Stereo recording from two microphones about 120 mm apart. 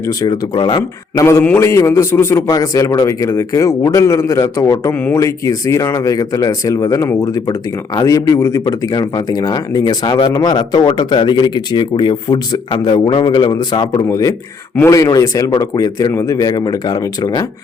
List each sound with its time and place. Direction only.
0.2 s speech: 35° left (ahead or behind)
1.2 s a man's voice: 25° left (ahead or behind)